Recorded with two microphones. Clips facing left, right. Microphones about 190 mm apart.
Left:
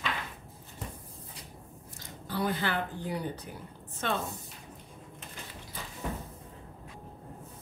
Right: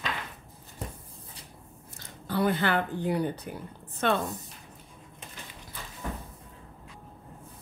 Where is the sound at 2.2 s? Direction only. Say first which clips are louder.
Right 5 dB; 60° right (ahead or behind).